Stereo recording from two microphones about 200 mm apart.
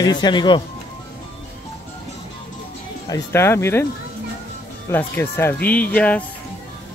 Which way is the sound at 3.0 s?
15° left (ahead or behind).